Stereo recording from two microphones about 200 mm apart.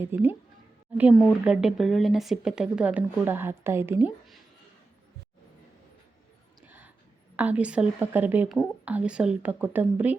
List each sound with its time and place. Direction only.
0.0 s a woman's voice: 10° right (ahead or behind)
6.7 s a sound: 10° right (ahead or behind)
7.3 s a woman's voice: 5° right (ahead or behind)